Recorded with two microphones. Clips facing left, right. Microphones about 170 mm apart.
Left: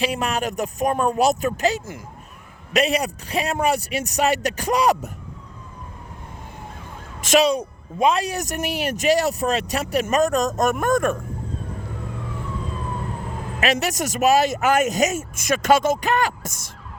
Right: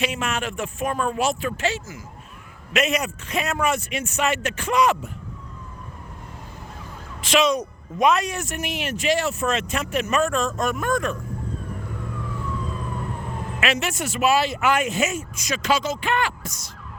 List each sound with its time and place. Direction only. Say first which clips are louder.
0.0 s speech: left 3 dB; 35° left (ahead or behind)
7.2 s speech: left 2 dB; 40° left (ahead or behind)
13.6 s speech: left 3 dB; 40° left (ahead or behind)